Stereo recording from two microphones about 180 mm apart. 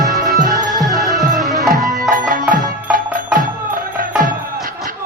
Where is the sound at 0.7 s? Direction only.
Centre (ahead or behind).